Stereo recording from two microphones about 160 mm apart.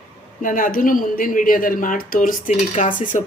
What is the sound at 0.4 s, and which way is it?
Speech, 60° left (ahead or behind).